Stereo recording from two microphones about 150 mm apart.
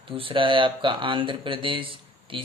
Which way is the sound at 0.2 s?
35° right (ahead or behind).